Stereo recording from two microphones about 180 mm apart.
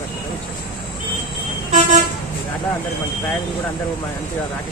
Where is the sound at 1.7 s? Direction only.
40° right (ahead or behind).